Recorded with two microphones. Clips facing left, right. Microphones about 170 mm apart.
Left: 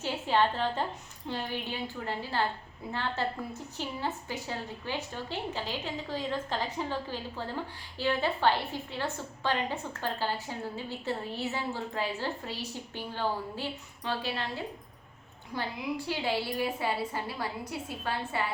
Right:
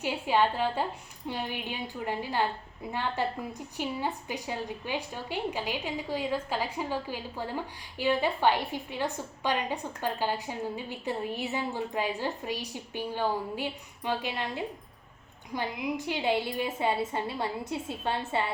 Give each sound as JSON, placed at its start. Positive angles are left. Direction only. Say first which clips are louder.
{"t": 0.0, "sound": "a woman's voice", "louder": "right 1 dB", "side_deg": -10}